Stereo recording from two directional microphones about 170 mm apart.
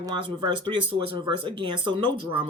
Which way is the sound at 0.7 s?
25° right (ahead or behind).